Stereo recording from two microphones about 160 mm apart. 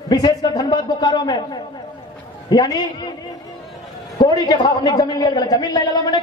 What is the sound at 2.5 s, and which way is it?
Speech, 25° left (ahead or behind).